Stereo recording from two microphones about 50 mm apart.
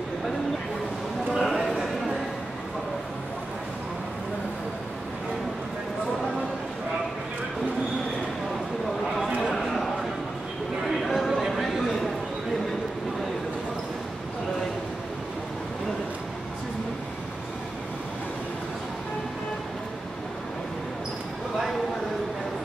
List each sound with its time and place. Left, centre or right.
1.4 s clip-clop: centre
9.6 s a sound: centre
11.0 s chatter: centre